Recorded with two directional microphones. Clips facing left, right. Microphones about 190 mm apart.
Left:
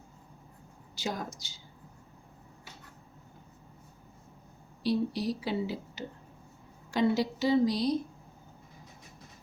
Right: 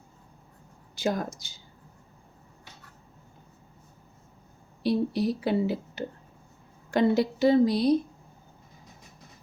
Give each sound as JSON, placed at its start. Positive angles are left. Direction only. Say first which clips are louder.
{"t": 0.9, "sound": "a woman's voice", "louder": "right 7 dB", "side_deg": -55}
{"t": 4.8, "sound": "a woman's voice", "louder": "right 4 dB", "side_deg": -55}